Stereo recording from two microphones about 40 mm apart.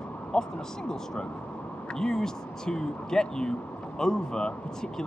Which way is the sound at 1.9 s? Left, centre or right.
Centre.